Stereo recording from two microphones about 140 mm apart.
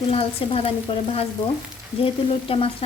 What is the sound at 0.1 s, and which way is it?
Frying, 45° left (ahead or behind).